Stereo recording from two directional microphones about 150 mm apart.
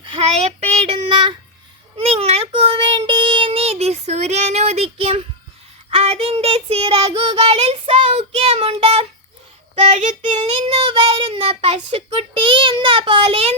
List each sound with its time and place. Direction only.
0.0 s child singing: 40° right (ahead or behind)
9.8 s child singing: 50° right (ahead or behind)
10.3 s child singing: 40° right (ahead or behind)